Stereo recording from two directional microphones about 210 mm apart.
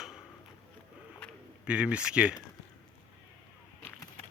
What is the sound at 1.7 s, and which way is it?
Speech, 5° right (ahead or behind).